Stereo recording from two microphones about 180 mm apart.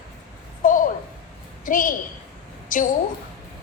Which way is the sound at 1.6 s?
50° left (ahead or behind).